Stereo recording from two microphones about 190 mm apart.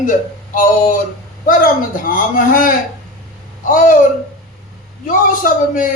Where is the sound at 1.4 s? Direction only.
45° left (ahead or behind).